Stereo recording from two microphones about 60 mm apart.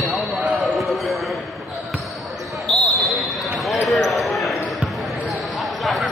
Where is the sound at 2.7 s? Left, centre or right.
Centre.